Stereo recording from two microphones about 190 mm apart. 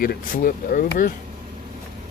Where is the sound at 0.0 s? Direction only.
50° left (ahead or behind).